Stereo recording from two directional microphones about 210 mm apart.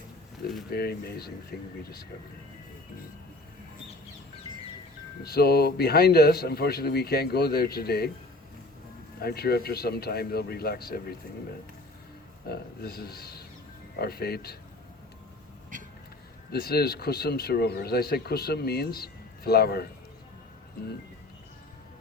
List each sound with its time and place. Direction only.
0.7 s speech: 50° left (ahead or behind)
5.2 s speech: 50° left (ahead or behind)
9.2 s speech: 45° left (ahead or behind)
12.5 s speech: 50° left (ahead or behind)
16.5 s speech: 50° left (ahead or behind)